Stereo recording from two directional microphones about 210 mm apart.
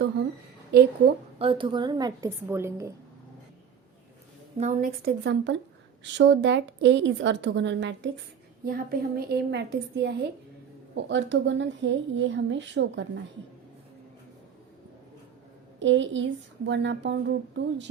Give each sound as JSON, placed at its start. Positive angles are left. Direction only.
{"t": 0.7, "sound": "a woman's voice", "side_deg": -50}
{"t": 1.4, "sound": "a woman's voice", "side_deg": -25}
{"t": 4.5, "sound": "a woman's voice", "side_deg": -35}
{"t": 8.6, "sound": "a woman's voice", "side_deg": -45}
{"t": 15.8, "sound": "speech", "side_deg": -60}